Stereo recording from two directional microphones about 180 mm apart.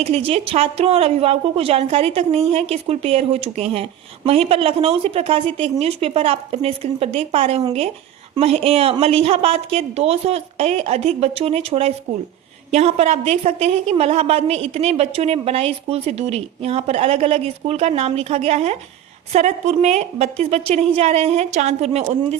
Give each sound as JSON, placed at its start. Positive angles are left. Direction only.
{"t": 0.0, "sound": "a woman's voice", "side_deg": -35}